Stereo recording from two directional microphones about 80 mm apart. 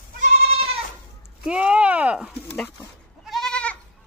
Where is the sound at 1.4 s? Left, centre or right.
Centre.